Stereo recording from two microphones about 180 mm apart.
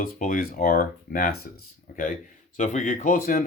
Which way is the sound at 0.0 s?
50° left (ahead or behind).